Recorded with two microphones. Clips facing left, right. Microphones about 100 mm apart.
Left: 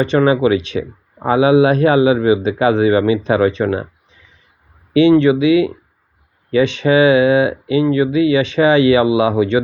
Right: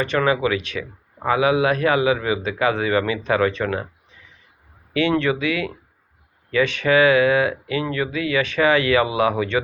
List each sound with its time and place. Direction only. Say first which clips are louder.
0.0 s speech: left 7 dB; 25° left (ahead or behind)
4.9 s speech: left 9 dB; 20° left (ahead or behind)